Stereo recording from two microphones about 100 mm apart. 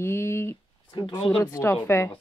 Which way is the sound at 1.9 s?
25° left (ahead or behind).